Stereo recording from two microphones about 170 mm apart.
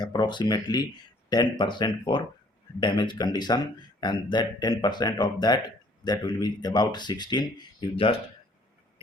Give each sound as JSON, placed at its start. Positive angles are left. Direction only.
{"t": 0.0, "sound": "speech", "side_deg": 25}